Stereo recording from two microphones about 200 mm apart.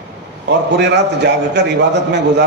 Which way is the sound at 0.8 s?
60° right (ahead or behind).